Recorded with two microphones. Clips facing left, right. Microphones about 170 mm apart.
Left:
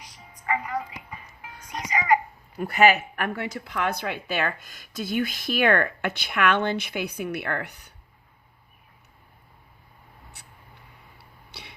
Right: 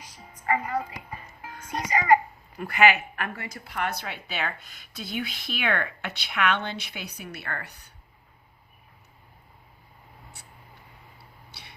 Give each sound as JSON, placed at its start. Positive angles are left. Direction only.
{"t": 0.4, "sound": "music", "side_deg": -35}
{"t": 1.9, "sound": "babbling", "side_deg": -35}
{"t": 2.7, "sound": "speech", "side_deg": 40}
{"t": 3.3, "sound": "speech", "side_deg": 70}